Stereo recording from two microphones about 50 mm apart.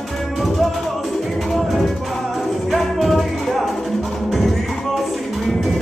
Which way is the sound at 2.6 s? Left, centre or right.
Centre.